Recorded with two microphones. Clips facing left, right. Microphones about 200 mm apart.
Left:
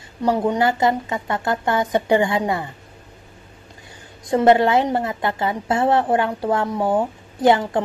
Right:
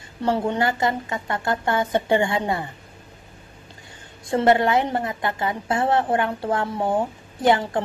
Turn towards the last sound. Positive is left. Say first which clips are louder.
# left 3 dB
turn(degrees=20)  # may be behind; listen again after turning